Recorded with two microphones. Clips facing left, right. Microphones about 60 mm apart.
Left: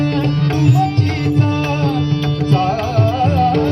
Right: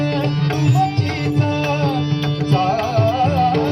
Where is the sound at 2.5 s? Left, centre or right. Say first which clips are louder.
Even; left.